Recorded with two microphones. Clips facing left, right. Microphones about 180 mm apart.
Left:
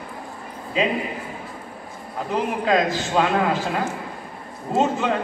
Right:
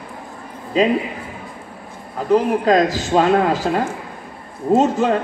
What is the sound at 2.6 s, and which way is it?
A man's voice, 40° right (ahead or behind).